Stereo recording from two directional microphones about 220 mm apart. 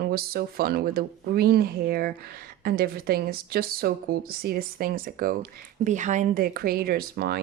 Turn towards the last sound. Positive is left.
turn(degrees=-45)  # may be behind; listen again after turning